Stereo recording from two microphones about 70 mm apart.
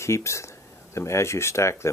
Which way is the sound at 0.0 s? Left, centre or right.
Left.